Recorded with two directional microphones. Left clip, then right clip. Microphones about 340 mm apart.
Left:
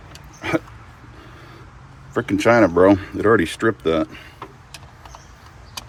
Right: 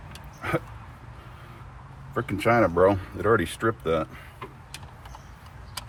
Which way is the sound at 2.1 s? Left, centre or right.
Left.